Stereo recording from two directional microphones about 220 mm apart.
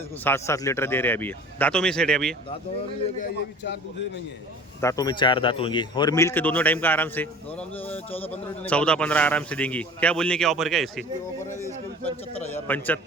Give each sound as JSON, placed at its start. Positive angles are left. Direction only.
{"t": 0.3, "sound": "speech", "side_deg": 10}
{"t": 3.3, "sound": "a man's voice", "side_deg": 50}
{"t": 4.8, "sound": "speech", "side_deg": 15}
{"t": 12.5, "sound": "speech", "side_deg": 10}